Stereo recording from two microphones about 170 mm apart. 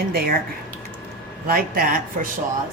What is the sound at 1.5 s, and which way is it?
Speech, 55° right (ahead or behind).